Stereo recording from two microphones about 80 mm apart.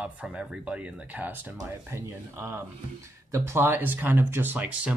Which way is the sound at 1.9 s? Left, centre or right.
Right.